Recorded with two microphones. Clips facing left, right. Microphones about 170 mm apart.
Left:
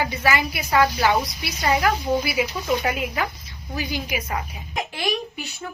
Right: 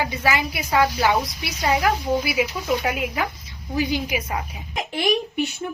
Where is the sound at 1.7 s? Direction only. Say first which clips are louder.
Even; 5° right (ahead or behind).